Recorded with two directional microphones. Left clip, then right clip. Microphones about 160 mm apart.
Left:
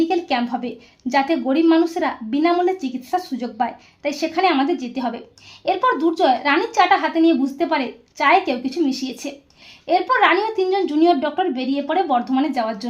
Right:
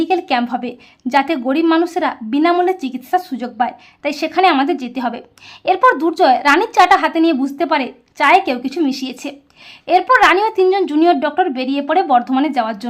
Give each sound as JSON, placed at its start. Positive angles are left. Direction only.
{"t": 0.0, "sound": "a woman's voice", "side_deg": -20}